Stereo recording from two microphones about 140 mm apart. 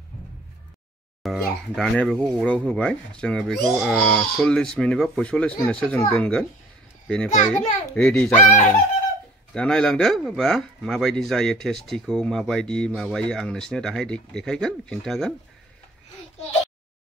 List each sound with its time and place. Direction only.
1.2 s a child's voice: centre (ahead or behind)
7.5 s a child's voice: 10° left (ahead or behind)
8.5 s speech: 60° left (ahead or behind)
9.5 s speech: 5° left (ahead or behind)